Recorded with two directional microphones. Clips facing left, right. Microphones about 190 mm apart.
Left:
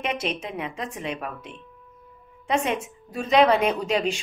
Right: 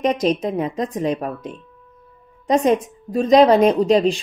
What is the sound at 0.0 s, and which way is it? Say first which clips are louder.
Speech: right 10 dB; 40° right (ahead or behind).